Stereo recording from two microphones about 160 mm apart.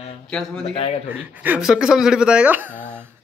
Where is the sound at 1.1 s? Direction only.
10° right (ahead or behind).